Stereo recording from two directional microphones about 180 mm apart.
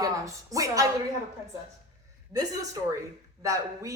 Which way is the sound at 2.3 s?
20° right (ahead or behind).